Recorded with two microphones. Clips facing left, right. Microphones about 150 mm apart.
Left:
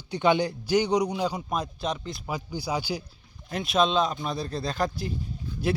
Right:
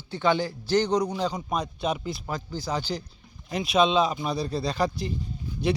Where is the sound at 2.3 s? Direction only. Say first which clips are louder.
Left 1 dB; 10° left (ahead or behind).